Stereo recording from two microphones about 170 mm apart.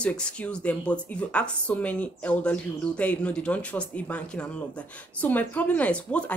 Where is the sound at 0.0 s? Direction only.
5° left (ahead or behind).